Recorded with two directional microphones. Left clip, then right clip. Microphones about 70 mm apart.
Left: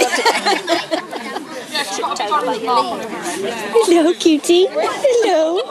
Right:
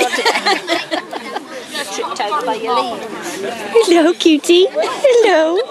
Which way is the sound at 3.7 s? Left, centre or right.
Right.